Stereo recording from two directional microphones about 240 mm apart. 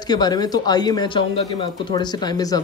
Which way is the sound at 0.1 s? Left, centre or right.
Centre.